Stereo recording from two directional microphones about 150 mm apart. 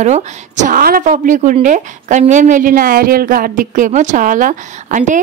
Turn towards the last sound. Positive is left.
turn(degrees=-55)  # may be behind; listen again after turning